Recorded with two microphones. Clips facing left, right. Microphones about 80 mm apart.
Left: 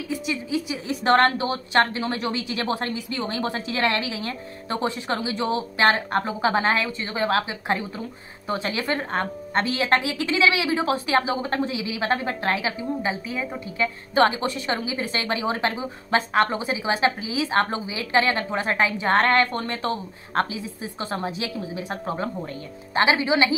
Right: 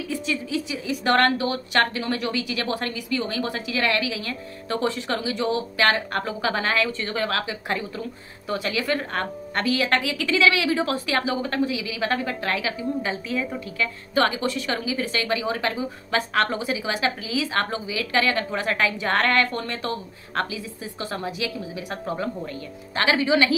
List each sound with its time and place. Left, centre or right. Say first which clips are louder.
0.1 s a woman's voice: left 1 dB; left